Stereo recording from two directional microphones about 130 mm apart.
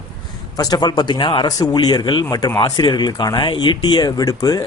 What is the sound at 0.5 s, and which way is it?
Speech, 30° left (ahead or behind).